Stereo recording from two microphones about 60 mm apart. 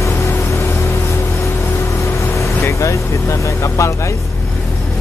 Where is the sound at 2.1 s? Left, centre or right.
Left.